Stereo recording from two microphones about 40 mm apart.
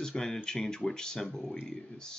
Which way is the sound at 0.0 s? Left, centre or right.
Centre.